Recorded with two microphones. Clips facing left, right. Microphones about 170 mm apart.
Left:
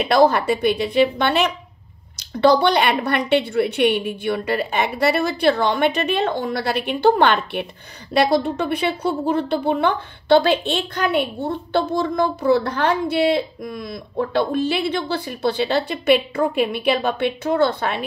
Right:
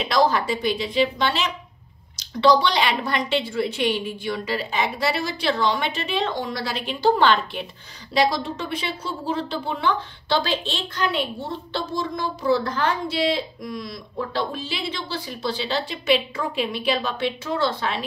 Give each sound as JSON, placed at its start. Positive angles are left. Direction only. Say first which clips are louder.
{"t": 0.0, "sound": "a woman's voice", "louder": "left 5 dB", "side_deg": 60}